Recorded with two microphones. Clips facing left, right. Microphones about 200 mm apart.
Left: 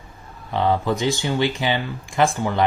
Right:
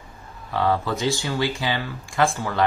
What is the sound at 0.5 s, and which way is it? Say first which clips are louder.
Speech: left 2 dB; 20° left (ahead or behind).